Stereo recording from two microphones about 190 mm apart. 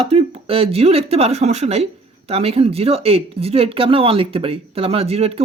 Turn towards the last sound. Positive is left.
turn(degrees=-30)  # may be behind; listen again after turning